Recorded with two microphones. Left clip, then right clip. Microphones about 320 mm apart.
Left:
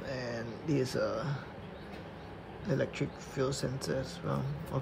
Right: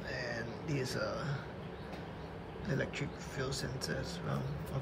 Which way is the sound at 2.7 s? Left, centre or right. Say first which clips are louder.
Left 5 dB; centre.